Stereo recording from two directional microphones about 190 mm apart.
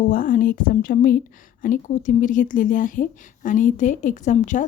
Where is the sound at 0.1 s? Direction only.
45° left (ahead or behind).